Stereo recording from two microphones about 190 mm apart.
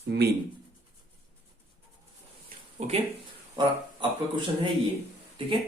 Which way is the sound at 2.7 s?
35° right (ahead or behind).